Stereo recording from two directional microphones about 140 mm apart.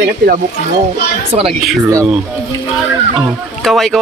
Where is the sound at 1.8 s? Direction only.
20° right (ahead or behind).